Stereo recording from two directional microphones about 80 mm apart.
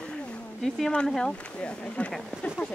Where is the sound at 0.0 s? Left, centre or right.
Centre.